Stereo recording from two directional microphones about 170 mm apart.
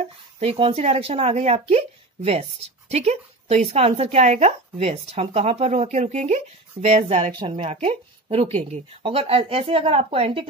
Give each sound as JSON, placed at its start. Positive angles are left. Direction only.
{"t": 0.4, "sound": "a woman's voice", "side_deg": -35}